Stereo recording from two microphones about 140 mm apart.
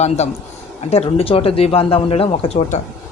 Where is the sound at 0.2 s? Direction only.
50° left (ahead or behind).